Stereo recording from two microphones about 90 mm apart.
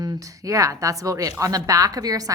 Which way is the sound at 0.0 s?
40° right (ahead or behind).